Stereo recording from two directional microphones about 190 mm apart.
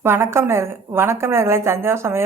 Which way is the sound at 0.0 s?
15° right (ahead or behind).